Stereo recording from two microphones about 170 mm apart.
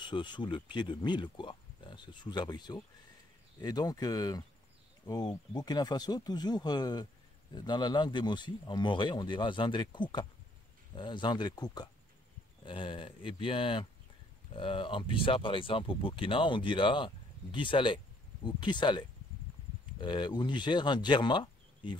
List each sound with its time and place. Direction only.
0.0 s speech: 25° left (ahead or behind)